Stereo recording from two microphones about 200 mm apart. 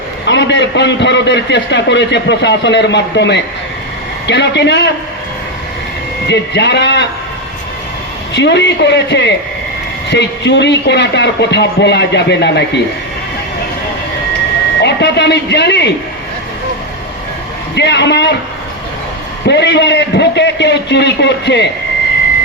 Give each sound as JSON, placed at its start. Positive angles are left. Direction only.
{"t": 0.3, "sound": "a man's voice", "side_deg": 60}
{"t": 6.2, "sound": "a man's voice", "side_deg": 60}
{"t": 8.3, "sound": "a man's voice", "side_deg": 60}
{"t": 14.8, "sound": "a man's voice", "side_deg": 60}
{"t": 17.7, "sound": "a man's voice", "side_deg": 60}
{"t": 19.5, "sound": "a man's voice", "side_deg": 60}